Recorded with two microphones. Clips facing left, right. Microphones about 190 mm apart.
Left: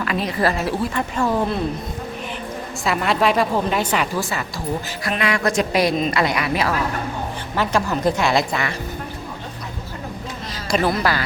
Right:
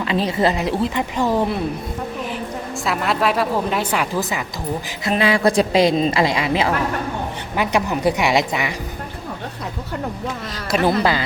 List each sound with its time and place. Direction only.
0.0 s a woman's voice: 25° right (ahead or behind)
2.8 s a woman's voice: centre (ahead or behind); by 4.4 s 15° right (ahead or behind)
5.0 s a woman's voice: 30° right (ahead or behind)
10.8 s a woman's voice: 20° right (ahead or behind)